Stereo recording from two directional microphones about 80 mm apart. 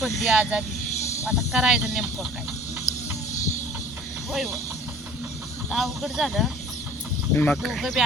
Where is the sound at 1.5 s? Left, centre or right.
Centre.